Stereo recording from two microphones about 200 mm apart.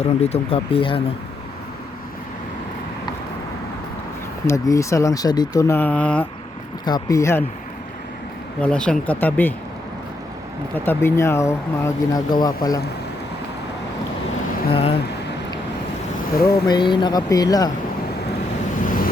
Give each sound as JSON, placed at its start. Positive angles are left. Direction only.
{"t": 0.0, "sound": "speech", "side_deg": 30}
{"t": 4.4, "sound": "speech", "side_deg": 15}
{"t": 6.8, "sound": "speech", "side_deg": 20}
{"t": 8.6, "sound": "speech", "side_deg": 5}
{"t": 10.8, "sound": "speech", "side_deg": 10}
{"t": 14.7, "sound": "speech", "side_deg": 30}
{"t": 16.6, "sound": "speech", "side_deg": 20}
{"t": 18.8, "sound": "vehicle", "side_deg": 40}